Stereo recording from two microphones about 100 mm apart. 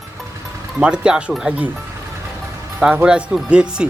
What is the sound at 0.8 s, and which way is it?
Speech, 10° right (ahead or behind).